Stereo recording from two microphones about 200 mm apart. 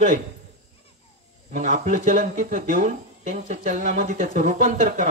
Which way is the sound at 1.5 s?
40° right (ahead or behind).